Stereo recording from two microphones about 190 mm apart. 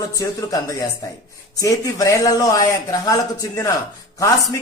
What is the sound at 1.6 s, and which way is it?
Speech, 15° left (ahead or behind).